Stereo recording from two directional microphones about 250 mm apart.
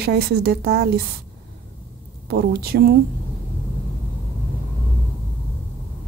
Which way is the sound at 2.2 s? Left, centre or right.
Right.